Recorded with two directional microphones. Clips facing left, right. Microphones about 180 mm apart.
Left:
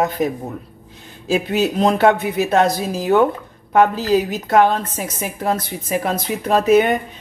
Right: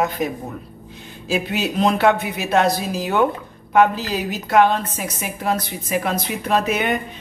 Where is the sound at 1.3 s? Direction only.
45° left (ahead or behind).